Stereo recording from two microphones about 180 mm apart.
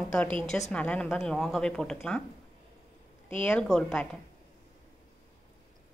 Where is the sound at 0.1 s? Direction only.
5° left (ahead or behind).